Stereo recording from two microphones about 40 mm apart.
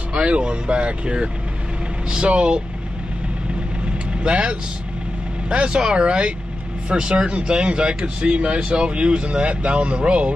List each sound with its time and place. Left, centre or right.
0.1 s speech: right
3.8 s vehicle: right
5.5 s speech: right